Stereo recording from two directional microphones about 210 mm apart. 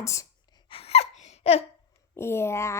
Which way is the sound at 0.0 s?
15° left (ahead or behind).